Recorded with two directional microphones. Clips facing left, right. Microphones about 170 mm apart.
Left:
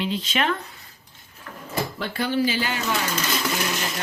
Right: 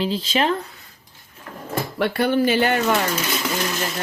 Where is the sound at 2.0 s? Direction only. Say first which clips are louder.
Right 6 dB; 60° right (ahead or behind).